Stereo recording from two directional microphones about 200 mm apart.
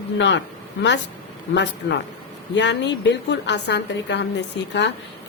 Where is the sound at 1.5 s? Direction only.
60° left (ahead or behind).